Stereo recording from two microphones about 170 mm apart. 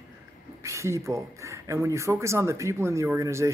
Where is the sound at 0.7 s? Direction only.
15° right (ahead or behind).